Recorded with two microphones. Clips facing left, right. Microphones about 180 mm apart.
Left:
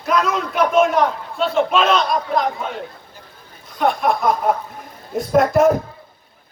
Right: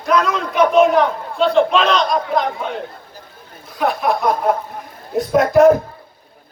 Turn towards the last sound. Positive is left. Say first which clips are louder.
# right 3 dB
turn(degrees=0)  # may be behind; listen again after turning